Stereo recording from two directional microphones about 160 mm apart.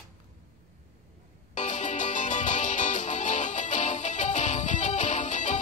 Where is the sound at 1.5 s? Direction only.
50° left (ahead or behind).